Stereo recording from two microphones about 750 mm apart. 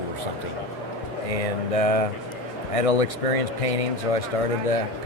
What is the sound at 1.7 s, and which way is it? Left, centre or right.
Speech, left.